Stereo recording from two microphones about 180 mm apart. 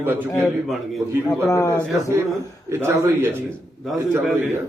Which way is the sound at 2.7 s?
15° right (ahead or behind).